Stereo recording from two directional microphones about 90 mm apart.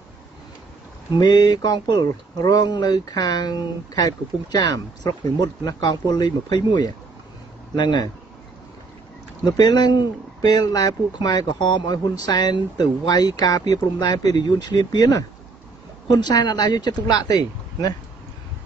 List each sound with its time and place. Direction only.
1.1 s speech: 50° left (ahead or behind)
9.4 s speech: 50° left (ahead or behind)